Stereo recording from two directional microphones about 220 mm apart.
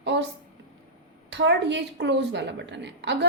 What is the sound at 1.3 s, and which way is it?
A woman's voice, 55° right (ahead or behind).